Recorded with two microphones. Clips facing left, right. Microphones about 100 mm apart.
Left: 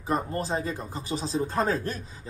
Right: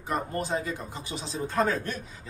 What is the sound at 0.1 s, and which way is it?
Speech, 30° left (ahead or behind).